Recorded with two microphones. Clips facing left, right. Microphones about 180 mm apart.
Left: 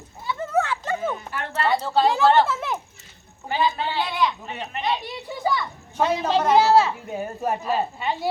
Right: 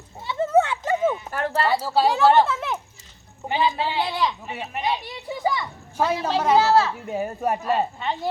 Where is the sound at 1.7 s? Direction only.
5° right (ahead or behind).